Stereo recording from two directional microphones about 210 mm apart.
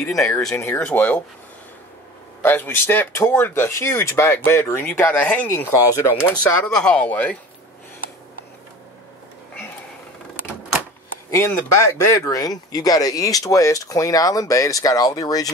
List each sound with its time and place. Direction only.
0.0 s speech: 5° left (ahead or behind)
2.4 s speech: 10° left (ahead or behind)
11.2 s speech: 10° left (ahead or behind)